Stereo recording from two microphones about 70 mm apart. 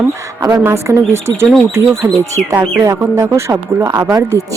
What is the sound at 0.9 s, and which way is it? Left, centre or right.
Speech, right.